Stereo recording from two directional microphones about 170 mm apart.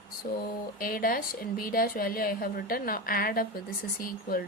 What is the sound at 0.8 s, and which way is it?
A woman's voice, 55° left (ahead or behind).